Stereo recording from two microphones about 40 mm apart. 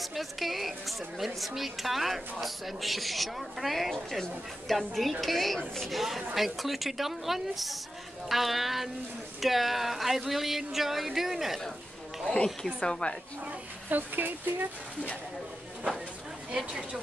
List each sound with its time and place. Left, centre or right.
0.0 s a woman's voice: centre
12.6 s a woman's voice: centre
13.5 s speech: right
16.5 s speech: centre